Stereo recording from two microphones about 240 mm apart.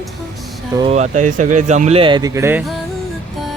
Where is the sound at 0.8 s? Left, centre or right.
Right; by 2.7 s centre.